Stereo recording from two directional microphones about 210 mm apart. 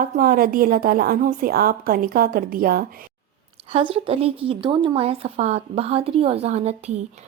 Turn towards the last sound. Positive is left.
turn(degrees=-30)  # may be behind; listen again after turning